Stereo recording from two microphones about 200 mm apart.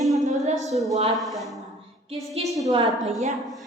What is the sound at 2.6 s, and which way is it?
Speech, 20° right (ahead or behind).